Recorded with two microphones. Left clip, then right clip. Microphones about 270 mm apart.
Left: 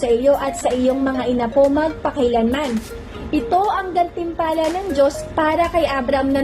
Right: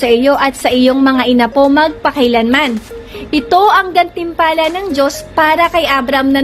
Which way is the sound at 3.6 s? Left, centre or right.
Right.